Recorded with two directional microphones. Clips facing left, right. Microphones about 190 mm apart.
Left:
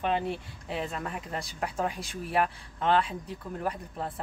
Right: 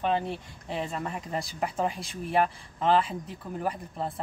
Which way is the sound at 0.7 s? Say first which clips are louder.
Right 1 dB; centre (ahead or behind).